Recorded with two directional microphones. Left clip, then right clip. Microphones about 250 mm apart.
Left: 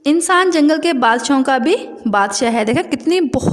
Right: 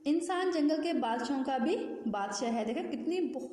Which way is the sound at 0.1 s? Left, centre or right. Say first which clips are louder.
Left 18 dB; left.